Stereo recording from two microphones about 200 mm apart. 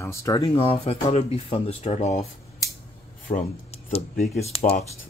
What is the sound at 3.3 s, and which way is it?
Speech, 25° left (ahead or behind).